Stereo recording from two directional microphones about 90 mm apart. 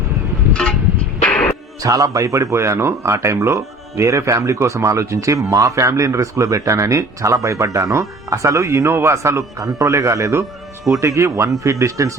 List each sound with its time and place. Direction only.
0.5 s a sound: 10° left (ahead or behind)
1.2 s music: 15° left (ahead or behind)
1.8 s speech: 40° right (ahead or behind)